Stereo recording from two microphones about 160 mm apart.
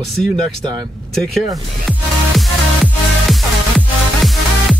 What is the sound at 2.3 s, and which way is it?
Music, centre (ahead or behind).